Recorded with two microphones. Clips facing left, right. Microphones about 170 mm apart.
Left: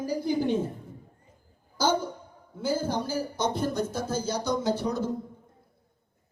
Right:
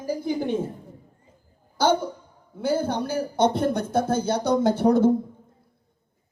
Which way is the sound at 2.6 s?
60° right (ahead or behind).